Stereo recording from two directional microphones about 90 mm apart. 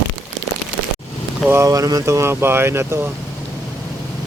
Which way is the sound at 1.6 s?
40° right (ahead or behind).